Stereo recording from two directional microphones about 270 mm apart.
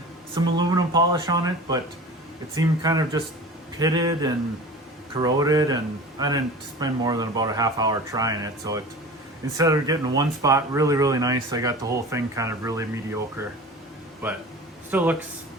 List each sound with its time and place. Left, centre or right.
0.3 s speech: centre
14.8 s speech: centre